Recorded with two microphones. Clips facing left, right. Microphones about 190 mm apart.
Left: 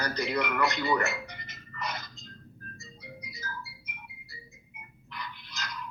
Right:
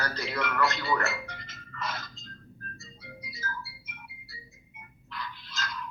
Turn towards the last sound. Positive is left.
turn(degrees=15)  # may be behind; listen again after turning